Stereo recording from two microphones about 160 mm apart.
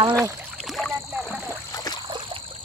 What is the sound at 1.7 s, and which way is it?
Stream, 20° left (ahead or behind).